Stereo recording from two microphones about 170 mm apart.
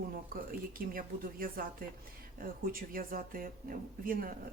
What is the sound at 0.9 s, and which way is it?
Speech, 55° right (ahead or behind).